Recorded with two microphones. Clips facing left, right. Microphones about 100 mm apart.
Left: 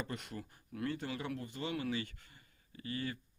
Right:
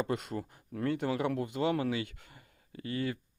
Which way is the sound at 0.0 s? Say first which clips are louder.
Right 9 dB; 50° right (ahead or behind).